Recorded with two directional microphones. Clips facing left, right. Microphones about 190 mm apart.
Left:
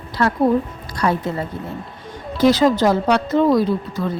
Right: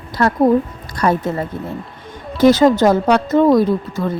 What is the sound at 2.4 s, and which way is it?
A woman's voice, 50° right (ahead or behind).